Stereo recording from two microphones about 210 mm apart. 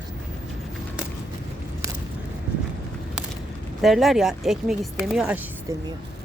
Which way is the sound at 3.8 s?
Centre (ahead or behind).